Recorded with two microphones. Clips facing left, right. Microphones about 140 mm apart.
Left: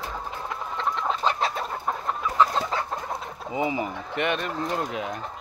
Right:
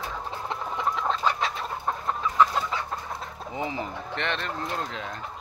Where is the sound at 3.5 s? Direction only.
10° left (ahead or behind).